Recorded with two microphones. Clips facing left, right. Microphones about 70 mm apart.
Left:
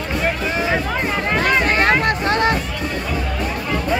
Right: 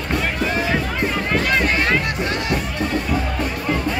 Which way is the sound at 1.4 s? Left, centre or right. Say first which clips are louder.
Left 5 dB; left.